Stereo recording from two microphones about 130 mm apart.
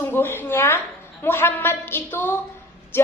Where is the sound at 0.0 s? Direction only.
15° left (ahead or behind).